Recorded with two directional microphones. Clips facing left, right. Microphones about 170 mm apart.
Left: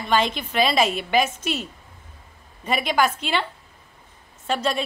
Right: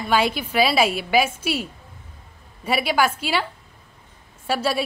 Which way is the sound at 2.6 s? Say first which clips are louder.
Right 1 dB; 5° right (ahead or behind).